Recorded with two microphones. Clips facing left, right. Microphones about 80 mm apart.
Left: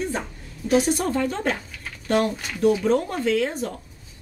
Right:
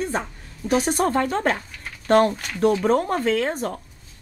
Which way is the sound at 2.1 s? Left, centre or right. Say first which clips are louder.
Right 5 dB; right.